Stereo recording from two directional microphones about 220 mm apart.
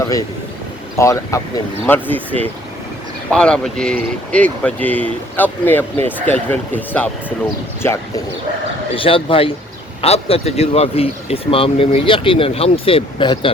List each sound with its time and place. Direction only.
0.9 s speech: 15° left (ahead or behind)
9.0 s speech: 25° left (ahead or behind)